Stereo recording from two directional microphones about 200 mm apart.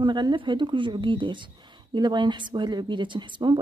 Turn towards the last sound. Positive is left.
turn(degrees=-25)  # may be behind; listen again after turning